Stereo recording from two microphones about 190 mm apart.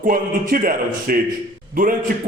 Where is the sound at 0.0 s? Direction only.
45° right (ahead or behind).